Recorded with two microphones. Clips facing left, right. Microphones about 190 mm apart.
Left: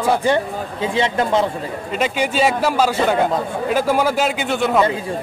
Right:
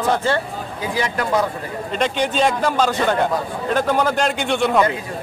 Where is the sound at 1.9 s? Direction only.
5° left (ahead or behind).